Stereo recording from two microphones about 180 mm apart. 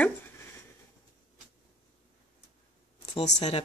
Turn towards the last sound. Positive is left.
turn(degrees=35)  # may be behind; listen again after turning